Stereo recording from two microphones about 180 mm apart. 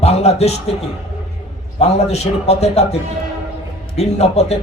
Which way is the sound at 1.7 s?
35° left (ahead or behind).